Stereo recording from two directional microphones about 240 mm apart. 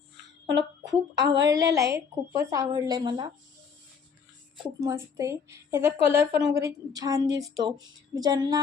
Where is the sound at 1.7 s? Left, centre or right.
Centre.